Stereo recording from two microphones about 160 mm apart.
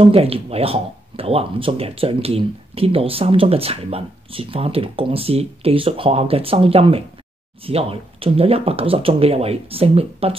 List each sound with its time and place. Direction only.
0.0 s speech: 40° right (ahead or behind)